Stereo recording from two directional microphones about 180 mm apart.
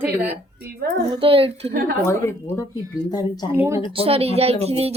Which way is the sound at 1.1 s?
30° right (ahead or behind).